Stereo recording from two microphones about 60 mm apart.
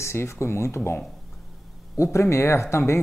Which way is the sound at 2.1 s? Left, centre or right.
Left.